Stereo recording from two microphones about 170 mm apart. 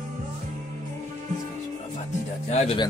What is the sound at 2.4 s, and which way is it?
Speech, 40° left (ahead or behind).